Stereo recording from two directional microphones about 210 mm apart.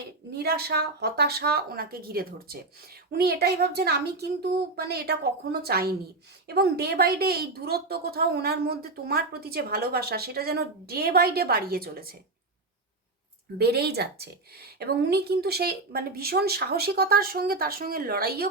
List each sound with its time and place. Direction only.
0.3 s a woman's voice: 50° right (ahead or behind)
13.6 s a woman's voice: 50° right (ahead or behind)